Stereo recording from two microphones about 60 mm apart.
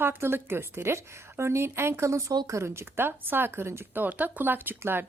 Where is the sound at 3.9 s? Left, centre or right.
Right.